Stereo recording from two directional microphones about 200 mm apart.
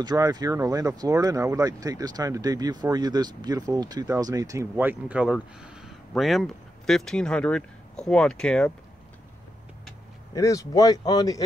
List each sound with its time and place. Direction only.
0.0 s speech: 20° right (ahead or behind); by 8.7 s 5° left (ahead or behind)
10.3 s speech: 15° left (ahead or behind)